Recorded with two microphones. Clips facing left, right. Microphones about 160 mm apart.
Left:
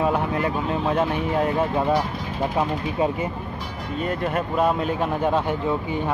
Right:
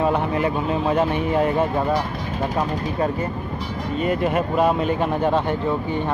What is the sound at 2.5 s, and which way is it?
Speech, 15° left (ahead or behind).